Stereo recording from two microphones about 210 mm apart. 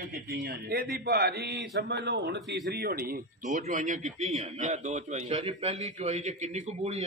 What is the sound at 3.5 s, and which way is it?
A man's voice, 35° right (ahead or behind).